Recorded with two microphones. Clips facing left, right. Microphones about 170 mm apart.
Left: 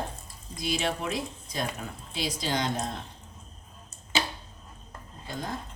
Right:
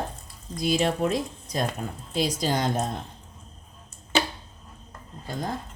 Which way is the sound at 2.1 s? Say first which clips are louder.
Right 5 dB; 45° right (ahead or behind).